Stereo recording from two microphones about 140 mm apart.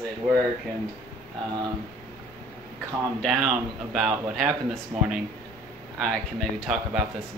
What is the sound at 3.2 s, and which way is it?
Speech, 5° right (ahead or behind).